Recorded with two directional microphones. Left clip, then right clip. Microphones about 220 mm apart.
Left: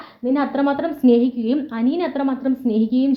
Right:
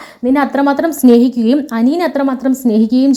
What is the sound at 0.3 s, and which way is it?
A woman's voice, 45° right (ahead or behind).